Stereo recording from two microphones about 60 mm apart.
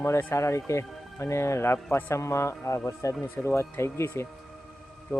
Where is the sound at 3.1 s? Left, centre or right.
Left.